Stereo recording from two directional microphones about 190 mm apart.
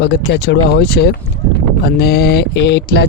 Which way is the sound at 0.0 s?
65° left (ahead or behind).